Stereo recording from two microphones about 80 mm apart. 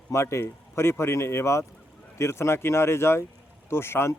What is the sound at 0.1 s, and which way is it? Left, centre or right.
Speech, left.